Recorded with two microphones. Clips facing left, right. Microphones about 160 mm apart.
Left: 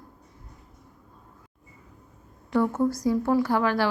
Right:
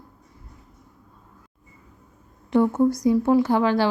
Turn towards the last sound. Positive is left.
turn(degrees=-25)  # may be behind; listen again after turning